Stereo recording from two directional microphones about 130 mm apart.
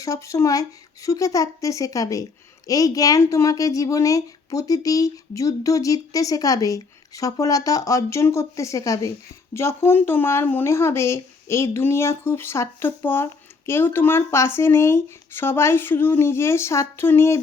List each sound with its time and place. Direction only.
0.0 s speech: 25° left (ahead or behind)